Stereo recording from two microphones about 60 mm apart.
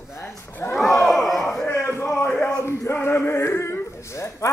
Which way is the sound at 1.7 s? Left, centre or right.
Left.